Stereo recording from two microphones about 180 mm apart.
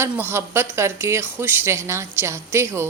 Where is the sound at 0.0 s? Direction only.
15° right (ahead or behind).